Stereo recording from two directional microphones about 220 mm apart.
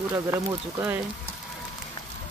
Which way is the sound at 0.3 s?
10° right (ahead or behind).